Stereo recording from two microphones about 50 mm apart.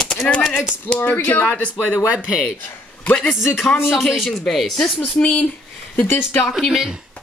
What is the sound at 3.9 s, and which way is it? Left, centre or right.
Speech, centre.